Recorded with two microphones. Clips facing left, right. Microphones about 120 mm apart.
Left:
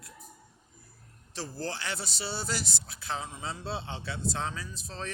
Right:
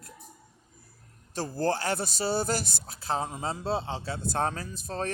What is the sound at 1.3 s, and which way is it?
Speech, 45° right (ahead or behind).